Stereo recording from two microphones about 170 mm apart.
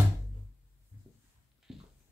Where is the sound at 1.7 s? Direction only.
Centre (ahead or behind).